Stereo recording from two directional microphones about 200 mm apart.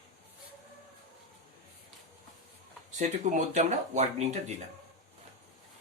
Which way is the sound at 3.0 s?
40° right (ahead or behind).